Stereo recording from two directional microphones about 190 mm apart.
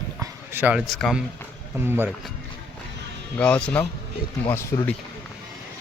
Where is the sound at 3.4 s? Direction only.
5° left (ahead or behind).